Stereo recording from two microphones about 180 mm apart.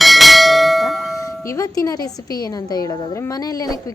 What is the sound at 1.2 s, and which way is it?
A woman's voice, 20° left (ahead or behind).